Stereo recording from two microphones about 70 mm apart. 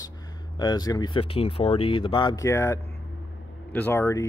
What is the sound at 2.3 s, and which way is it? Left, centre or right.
Speech, left.